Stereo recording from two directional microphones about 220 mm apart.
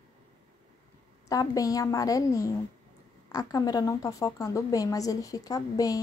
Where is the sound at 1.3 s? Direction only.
15° left (ahead or behind).